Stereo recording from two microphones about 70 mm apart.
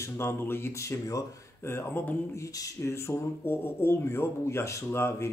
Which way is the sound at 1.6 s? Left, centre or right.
Left.